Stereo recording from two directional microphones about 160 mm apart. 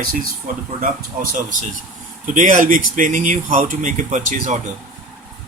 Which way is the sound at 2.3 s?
55° right (ahead or behind).